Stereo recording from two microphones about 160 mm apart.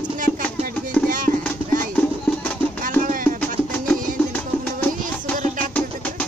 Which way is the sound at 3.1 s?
60° right (ahead or behind).